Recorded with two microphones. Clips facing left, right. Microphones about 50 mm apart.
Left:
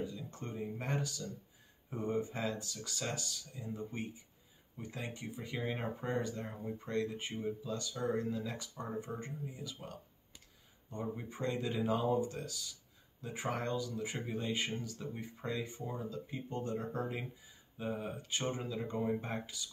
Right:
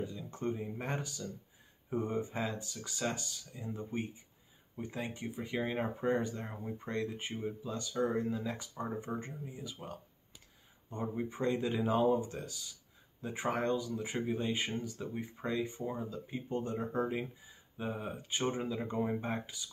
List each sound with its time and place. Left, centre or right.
0.0 s speech: right